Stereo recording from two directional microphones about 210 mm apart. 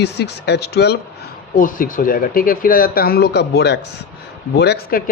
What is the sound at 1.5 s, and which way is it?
A man's voice, 40° left (ahead or behind).